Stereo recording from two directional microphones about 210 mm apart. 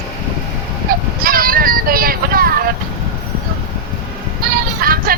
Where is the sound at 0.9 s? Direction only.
45° right (ahead or behind).